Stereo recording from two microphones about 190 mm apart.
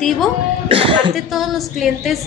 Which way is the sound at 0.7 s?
25° right (ahead or behind).